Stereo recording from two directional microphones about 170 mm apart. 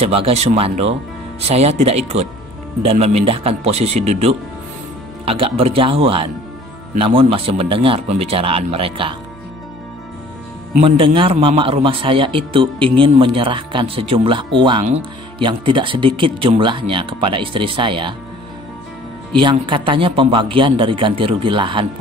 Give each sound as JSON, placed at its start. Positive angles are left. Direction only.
{"t": 0.0, "sound": "speech", "side_deg": -35}
{"t": 10.8, "sound": "speech", "side_deg": -30}
{"t": 19.3, "sound": "speech", "side_deg": -30}